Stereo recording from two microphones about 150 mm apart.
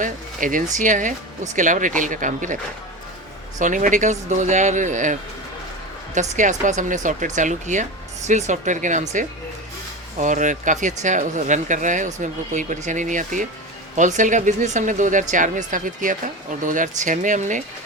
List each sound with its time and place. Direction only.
0.0 s speech: 60° right (ahead or behind)
3.6 s speech: 60° right (ahead or behind)
6.1 s speech: 55° right (ahead or behind)